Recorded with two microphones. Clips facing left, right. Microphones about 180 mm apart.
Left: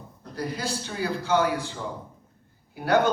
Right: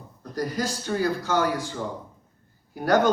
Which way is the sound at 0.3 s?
45° right (ahead or behind).